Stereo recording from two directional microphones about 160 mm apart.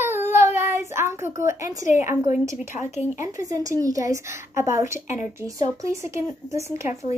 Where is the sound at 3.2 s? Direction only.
20° right (ahead or behind).